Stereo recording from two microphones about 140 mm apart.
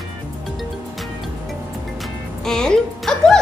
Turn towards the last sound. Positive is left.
turn(degrees=5)  # may be behind; listen again after turning